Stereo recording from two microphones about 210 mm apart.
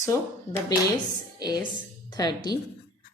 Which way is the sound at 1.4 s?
20° left (ahead or behind).